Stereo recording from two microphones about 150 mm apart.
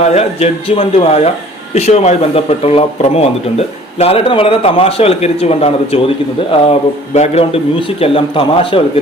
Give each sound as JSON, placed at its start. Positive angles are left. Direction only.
{"t": 0.0, "sound": "speech", "side_deg": 45}